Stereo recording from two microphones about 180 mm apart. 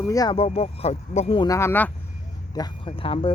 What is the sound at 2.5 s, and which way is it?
Speech, 25° left (ahead or behind).